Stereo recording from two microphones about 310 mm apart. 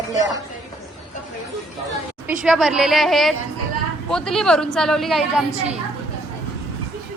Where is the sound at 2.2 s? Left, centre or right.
Centre.